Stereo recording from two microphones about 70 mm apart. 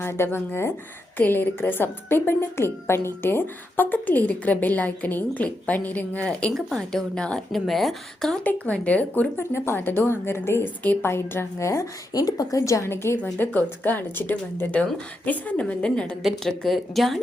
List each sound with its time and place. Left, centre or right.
0.0 s a woman's voice: left; by 8.4 s centre
8.4 s a woman's voice: centre
9.4 s a woman's voice: left
12.1 s speech: left
12.5 s a woman's voice: left
13.4 s a woman's voice: left; by 17.2 s centre